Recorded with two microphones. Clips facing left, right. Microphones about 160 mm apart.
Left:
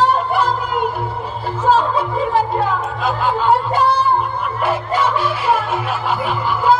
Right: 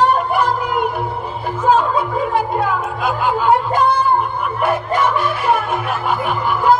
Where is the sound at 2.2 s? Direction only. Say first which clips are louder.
Left 1 dB; 10° right (ahead or behind).